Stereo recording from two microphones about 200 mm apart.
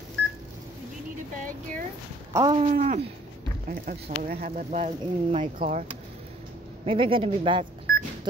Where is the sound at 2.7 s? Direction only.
35° right (ahead or behind).